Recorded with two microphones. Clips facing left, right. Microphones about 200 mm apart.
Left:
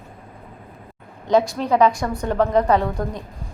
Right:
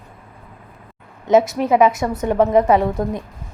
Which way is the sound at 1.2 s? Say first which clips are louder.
Right 3 dB; 20° right (ahead or behind).